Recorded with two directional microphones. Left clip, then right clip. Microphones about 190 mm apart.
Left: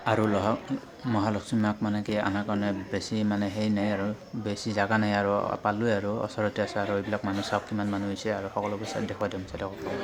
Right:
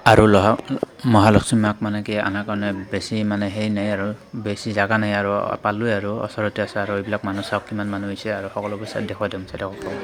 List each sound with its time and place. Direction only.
0.0 s speech: 55° right (ahead or behind)
1.5 s speech: 20° right (ahead or behind)